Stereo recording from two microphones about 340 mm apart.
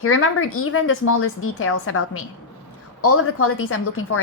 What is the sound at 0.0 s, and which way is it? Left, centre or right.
A woman's voice, left.